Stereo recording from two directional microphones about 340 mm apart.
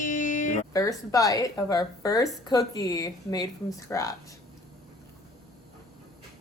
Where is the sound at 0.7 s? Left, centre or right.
Centre.